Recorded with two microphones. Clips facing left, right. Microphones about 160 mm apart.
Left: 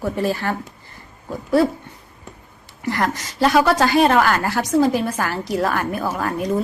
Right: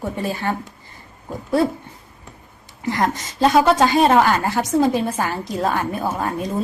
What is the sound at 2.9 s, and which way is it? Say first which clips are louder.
Speech: right 1 dB; 20° right (ahead or behind).